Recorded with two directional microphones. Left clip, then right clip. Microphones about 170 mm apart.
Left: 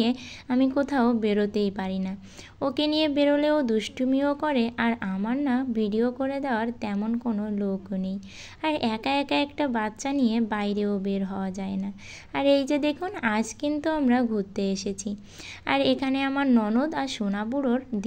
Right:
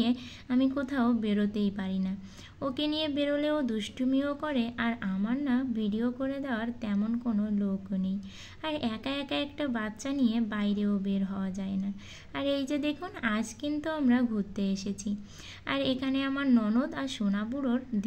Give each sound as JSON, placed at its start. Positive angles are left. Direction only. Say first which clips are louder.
{"t": 0.0, "sound": "a woman's voice", "louder": "left 4 dB", "side_deg": 30}